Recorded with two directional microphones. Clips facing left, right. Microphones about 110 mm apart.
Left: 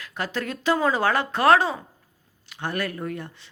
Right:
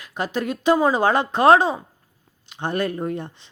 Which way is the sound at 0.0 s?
15° right (ahead or behind).